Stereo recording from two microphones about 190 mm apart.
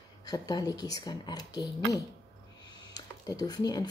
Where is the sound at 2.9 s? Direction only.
20° left (ahead or behind).